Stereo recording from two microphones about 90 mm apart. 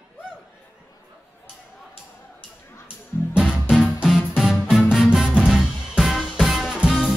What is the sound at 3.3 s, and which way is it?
Music, 10° right (ahead or behind).